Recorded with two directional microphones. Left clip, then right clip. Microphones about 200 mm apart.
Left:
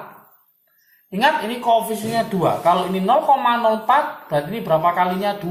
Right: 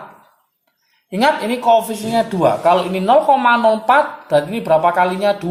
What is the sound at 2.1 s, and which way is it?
Speech, 50° right (ahead or behind).